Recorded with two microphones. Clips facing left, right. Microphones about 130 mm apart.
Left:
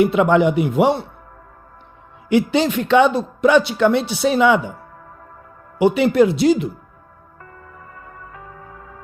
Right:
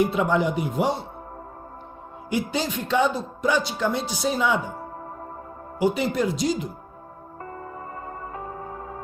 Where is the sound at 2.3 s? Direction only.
70° left (ahead or behind).